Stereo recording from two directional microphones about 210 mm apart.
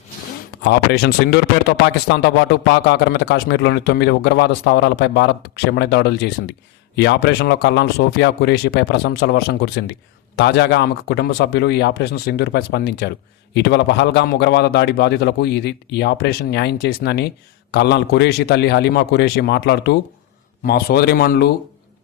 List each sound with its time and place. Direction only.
0.6 s a man's voice: 50° left (ahead or behind)